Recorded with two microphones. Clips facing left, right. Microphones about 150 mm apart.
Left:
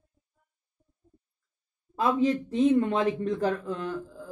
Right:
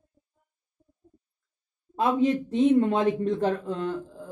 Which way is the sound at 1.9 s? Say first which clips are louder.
Right 1 dB; 25° right (ahead or behind).